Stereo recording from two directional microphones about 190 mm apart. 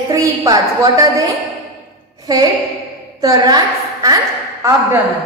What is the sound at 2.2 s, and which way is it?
A woman's voice, 20° right (ahead or behind).